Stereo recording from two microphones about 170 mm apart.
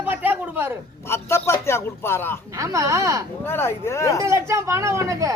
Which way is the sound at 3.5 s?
15° left (ahead or behind).